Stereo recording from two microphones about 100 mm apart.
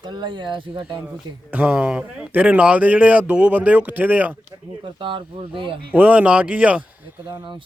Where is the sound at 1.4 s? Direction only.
15° right (ahead or behind).